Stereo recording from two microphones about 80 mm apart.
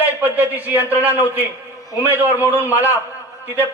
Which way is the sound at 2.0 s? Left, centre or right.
Right.